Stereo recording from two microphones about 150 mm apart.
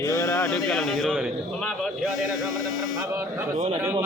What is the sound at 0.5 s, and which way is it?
Speech, centre (ahead or behind).